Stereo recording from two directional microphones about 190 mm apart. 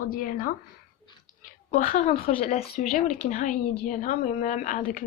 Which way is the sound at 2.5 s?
35° left (ahead or behind).